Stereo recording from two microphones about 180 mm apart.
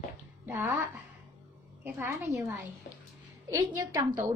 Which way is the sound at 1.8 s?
15° right (ahead or behind).